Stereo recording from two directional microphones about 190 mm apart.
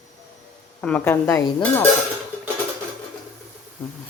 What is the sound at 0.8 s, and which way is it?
Speech, 10° left (ahead or behind).